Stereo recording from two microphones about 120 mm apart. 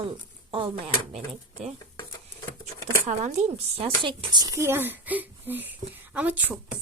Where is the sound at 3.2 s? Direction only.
65° right (ahead or behind).